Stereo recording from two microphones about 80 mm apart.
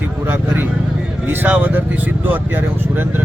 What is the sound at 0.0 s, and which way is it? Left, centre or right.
Speech, right.